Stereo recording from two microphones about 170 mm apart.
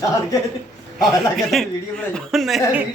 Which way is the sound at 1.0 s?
Centre (ahead or behind).